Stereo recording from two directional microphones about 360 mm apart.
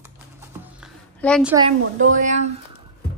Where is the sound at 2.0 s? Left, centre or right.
Right.